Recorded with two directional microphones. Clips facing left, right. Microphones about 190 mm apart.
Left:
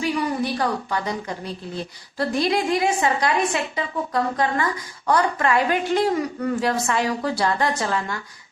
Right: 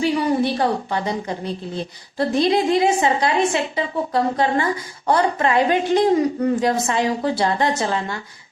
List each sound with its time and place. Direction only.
0.0 s a woman's voice: 25° right (ahead or behind)